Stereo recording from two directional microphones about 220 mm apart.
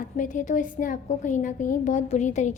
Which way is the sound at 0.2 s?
35° left (ahead or behind).